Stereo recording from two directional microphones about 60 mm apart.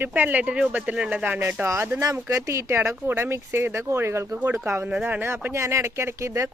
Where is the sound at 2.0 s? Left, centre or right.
Right.